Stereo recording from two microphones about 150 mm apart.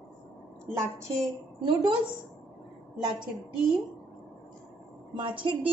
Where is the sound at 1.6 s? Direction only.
30° right (ahead or behind).